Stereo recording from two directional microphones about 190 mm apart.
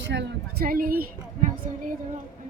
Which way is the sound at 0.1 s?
65° right (ahead or behind).